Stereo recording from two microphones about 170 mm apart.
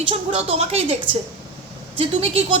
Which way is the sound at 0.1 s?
35° right (ahead or behind).